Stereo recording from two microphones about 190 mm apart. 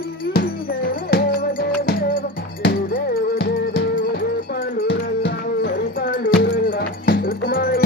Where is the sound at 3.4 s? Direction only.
60° left (ahead or behind).